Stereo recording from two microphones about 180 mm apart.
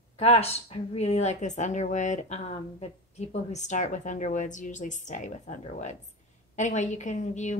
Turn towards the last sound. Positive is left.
turn(degrees=40)  # may be behind; listen again after turning